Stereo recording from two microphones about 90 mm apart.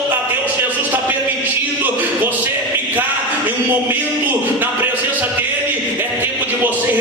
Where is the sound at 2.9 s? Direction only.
20° right (ahead or behind).